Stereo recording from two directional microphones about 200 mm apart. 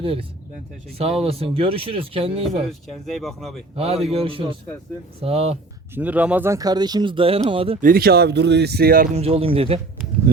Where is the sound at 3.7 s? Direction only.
30° right (ahead or behind).